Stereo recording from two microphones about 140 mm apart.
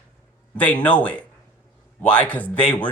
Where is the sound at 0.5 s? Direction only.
10° left (ahead or behind).